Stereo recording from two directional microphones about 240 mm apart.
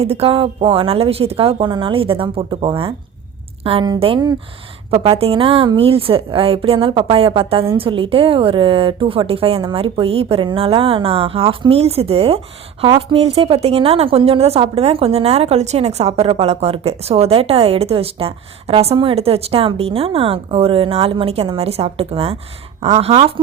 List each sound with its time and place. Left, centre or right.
0.0 s a woman's voice: right